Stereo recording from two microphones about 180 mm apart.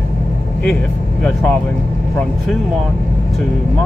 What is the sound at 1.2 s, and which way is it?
Speech, 5° left (ahead or behind).